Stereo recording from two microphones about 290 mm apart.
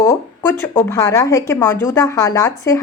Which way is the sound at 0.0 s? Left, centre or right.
Centre.